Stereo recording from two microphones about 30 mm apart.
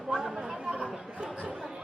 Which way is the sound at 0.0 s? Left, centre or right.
Centre.